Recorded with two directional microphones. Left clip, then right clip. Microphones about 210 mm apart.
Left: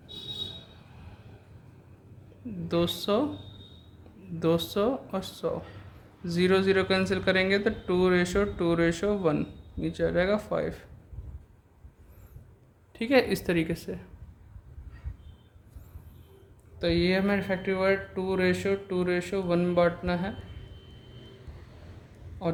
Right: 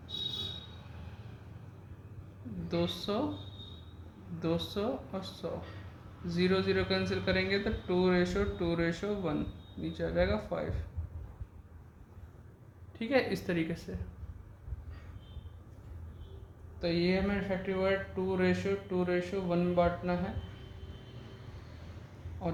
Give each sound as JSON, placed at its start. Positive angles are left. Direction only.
{"t": 2.6, "sound": "speech", "side_deg": 50}
{"t": 4.4, "sound": "speech", "side_deg": 50}
{"t": 12.9, "sound": "speech", "side_deg": 40}
{"t": 16.8, "sound": "speech", "side_deg": 55}
{"t": 22.4, "sound": "a man's voice", "side_deg": 55}